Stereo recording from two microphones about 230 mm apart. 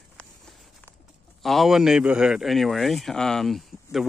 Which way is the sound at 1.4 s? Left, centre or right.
Centre.